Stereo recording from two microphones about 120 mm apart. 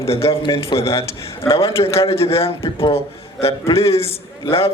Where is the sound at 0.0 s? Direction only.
55° left (ahead or behind).